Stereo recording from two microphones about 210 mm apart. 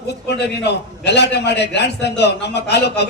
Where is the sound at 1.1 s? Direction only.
55° left (ahead or behind).